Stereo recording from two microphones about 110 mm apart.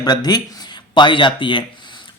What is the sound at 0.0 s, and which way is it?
Speech, 40° left (ahead or behind).